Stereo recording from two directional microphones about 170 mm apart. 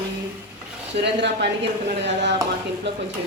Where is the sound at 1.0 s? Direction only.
90° right.